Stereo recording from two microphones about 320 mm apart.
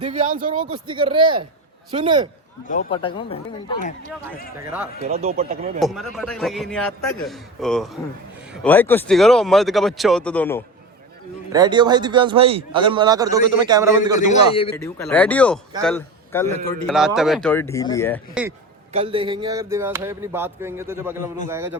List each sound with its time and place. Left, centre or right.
0.0 s a man's voice: right
2.6 s speech: centre
4.6 s speech: centre
5.0 s speech: right
5.8 s speech: centre
11.5 s a man's voice: centre
14.2 s a man's voice: centre
14.8 s a man's voice: centre
18.9 s a man's voice: centre